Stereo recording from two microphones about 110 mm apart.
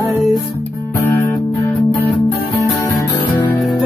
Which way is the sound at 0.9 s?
25° left (ahead or behind).